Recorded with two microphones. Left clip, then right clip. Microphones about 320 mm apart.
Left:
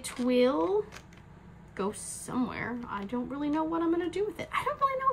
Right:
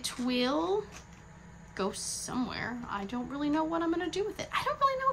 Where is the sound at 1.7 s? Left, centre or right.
Centre.